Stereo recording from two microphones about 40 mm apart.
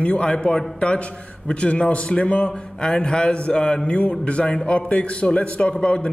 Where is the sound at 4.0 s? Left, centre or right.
Left.